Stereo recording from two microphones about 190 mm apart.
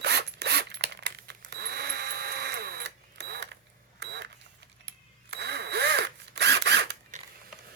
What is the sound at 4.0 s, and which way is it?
Vehicle, 65° right (ahead or behind).